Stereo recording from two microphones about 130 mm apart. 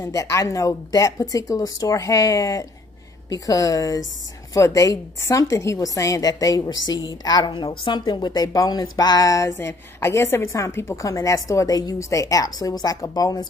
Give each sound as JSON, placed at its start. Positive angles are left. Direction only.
{"t": 0.0, "sound": "a woman's voice", "side_deg": 25}